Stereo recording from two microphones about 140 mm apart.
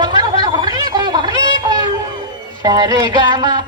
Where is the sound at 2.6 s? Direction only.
25° right (ahead or behind).